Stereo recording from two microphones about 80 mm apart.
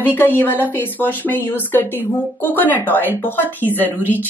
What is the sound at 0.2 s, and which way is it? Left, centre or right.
Speech, left.